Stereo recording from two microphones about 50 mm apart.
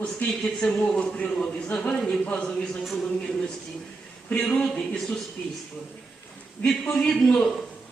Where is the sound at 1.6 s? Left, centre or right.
Left.